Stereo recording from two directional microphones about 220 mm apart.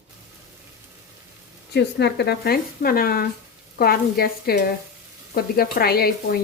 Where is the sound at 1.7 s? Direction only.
50° left (ahead or behind).